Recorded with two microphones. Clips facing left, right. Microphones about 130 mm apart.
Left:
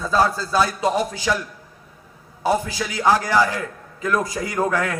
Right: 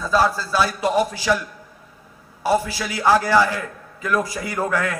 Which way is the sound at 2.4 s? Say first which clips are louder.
Right 1 dB; 20° left (ahead or behind).